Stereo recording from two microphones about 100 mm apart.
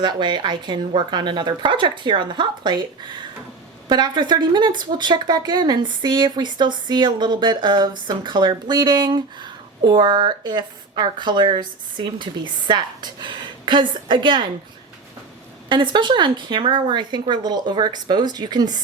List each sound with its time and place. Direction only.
0.0 s speech: 50° right (ahead or behind)
15.7 s speech: 55° right (ahead or behind)